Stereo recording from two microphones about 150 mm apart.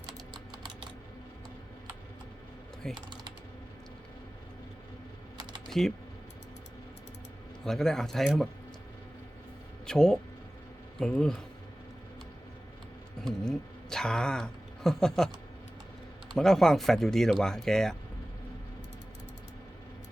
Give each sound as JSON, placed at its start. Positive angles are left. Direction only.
{"t": 2.9, "sound": "typing", "side_deg": -30}
{"t": 5.6, "sound": "typing", "side_deg": 0}
{"t": 7.6, "sound": "speech", "side_deg": 0}
{"t": 9.8, "sound": "speech", "side_deg": 5}
{"t": 13.2, "sound": "speech", "side_deg": 5}
{"t": 16.3, "sound": "speech", "side_deg": 5}